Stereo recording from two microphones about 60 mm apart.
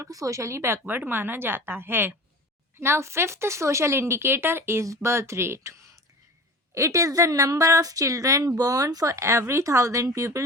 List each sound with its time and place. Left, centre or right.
0.0 s a woman's voice: right
6.7 s speech: right
9.1 s speech: right